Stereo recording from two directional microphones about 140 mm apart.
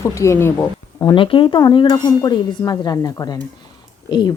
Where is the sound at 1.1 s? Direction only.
40° left (ahead or behind).